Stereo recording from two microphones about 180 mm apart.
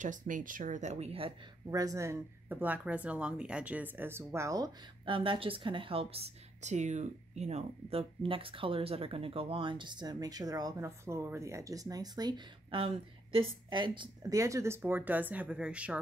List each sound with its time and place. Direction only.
0.0 s speech: 45° right (ahead or behind)
1.7 s speech: 20° right (ahead or behind)